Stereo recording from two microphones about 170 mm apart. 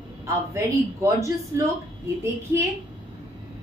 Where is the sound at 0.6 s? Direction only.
20° right (ahead or behind).